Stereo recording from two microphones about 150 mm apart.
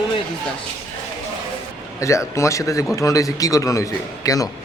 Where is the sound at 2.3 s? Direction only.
20° left (ahead or behind).